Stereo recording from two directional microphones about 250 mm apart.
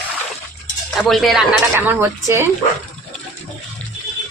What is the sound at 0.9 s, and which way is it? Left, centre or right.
Speech, centre.